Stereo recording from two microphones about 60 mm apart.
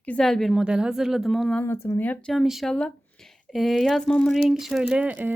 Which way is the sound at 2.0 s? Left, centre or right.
Left.